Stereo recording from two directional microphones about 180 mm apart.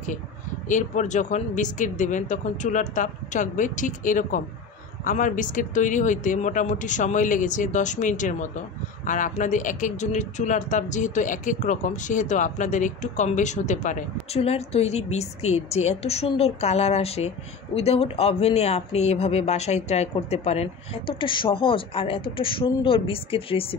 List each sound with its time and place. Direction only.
0.7 s speech: 45° left (ahead or behind)